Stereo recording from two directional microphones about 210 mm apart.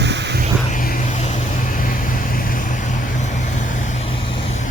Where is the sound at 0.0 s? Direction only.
55° right (ahead or behind).